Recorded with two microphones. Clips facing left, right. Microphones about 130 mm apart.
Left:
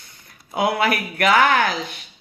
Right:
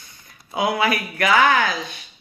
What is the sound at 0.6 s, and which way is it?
Speech, 60° left (ahead or behind).